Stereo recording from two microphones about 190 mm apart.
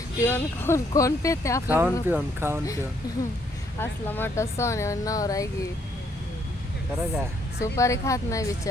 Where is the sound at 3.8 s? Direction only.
10° left (ahead or behind).